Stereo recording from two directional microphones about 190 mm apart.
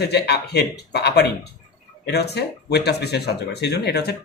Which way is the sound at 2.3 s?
60° left (ahead or behind).